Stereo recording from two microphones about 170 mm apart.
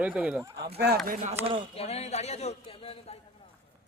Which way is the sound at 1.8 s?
35° left (ahead or behind).